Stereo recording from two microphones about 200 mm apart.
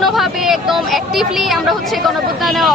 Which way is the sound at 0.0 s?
Centre (ahead or behind).